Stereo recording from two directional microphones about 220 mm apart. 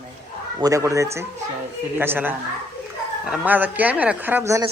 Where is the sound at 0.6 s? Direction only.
15° right (ahead or behind).